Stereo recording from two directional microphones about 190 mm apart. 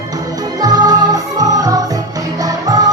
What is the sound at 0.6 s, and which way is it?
Music, 20° right (ahead or behind).